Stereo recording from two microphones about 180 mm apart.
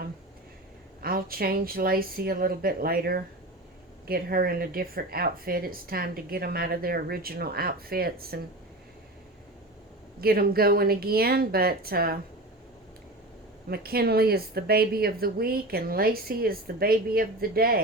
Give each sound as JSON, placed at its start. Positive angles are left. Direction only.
{"t": 1.0, "sound": "speech", "side_deg": -55}
{"t": 10.2, "sound": "speech", "side_deg": -60}
{"t": 13.7, "sound": "speech", "side_deg": -60}